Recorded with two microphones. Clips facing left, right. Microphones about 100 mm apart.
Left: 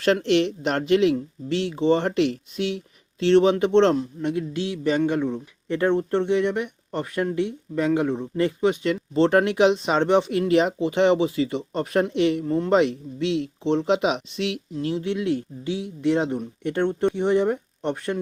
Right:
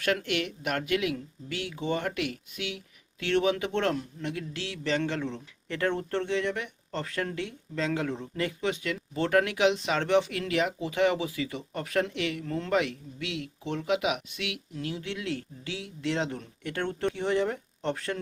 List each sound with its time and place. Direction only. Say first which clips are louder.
0.0 s speech: left 9 dB; 30° left (ahead or behind)